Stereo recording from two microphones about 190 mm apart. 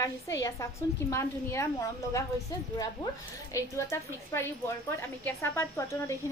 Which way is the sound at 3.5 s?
15° left (ahead or behind).